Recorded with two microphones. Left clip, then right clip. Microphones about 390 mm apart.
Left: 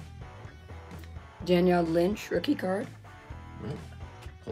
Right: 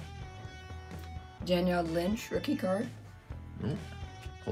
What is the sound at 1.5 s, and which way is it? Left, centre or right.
Speech, left.